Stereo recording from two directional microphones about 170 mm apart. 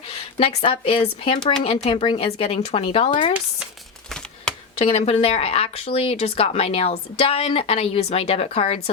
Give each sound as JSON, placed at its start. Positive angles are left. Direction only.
{"t": 0.3, "sound": "speech", "side_deg": 35}
{"t": 4.9, "sound": "speech", "side_deg": 35}